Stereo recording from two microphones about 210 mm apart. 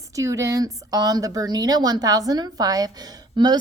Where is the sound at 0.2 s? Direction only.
15° right (ahead or behind).